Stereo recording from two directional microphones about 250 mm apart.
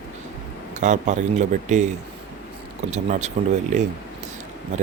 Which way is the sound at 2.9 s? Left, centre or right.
Right.